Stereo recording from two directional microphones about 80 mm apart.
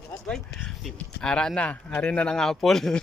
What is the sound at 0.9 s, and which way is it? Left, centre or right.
Speech, centre.